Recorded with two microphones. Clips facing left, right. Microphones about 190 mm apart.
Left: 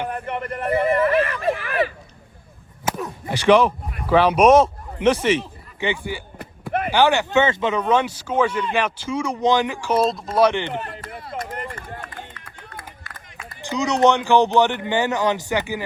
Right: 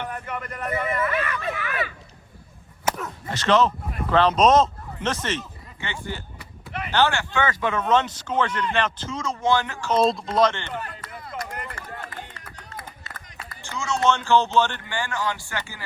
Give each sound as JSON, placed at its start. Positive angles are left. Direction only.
{"t": 0.3, "sound": "speech", "side_deg": 30}
{"t": 2.9, "sound": "speech", "side_deg": 15}
{"t": 6.4, "sound": "a sound", "side_deg": 50}
{"t": 6.9, "sound": "speech", "side_deg": 15}
{"t": 10.8, "sound": "a sound", "side_deg": 30}
{"t": 11.6, "sound": "run", "side_deg": 25}
{"t": 13.5, "sound": "speech", "side_deg": 15}